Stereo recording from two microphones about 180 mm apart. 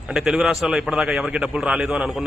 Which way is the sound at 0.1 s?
Centre (ahead or behind).